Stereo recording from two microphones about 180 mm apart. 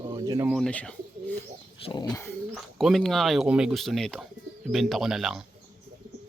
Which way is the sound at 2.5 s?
Centre (ahead or behind).